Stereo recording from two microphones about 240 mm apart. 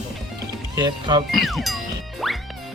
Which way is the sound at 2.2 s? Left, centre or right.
Centre.